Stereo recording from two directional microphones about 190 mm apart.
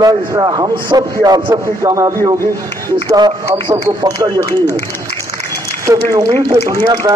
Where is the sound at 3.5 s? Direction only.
25° right (ahead or behind).